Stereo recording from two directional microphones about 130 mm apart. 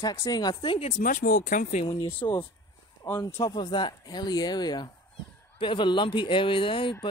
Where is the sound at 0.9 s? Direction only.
90° left.